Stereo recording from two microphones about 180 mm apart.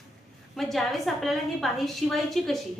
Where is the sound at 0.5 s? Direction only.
Centre (ahead or behind).